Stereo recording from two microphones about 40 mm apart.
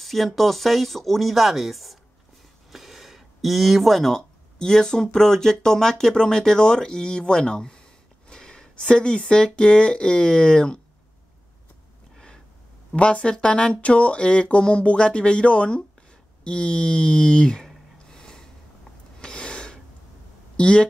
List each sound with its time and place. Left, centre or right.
0.0 s speech: centre
2.7 s a sound: centre
4.6 s speech: centre
12.9 s speech: left
18.1 s a sound: centre
19.2 s snort: left
20.5 s speech: left